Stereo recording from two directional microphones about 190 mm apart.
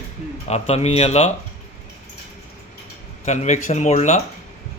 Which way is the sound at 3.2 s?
40° left (ahead or behind).